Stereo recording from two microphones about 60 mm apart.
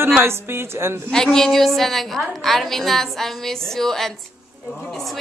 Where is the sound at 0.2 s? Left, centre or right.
Right.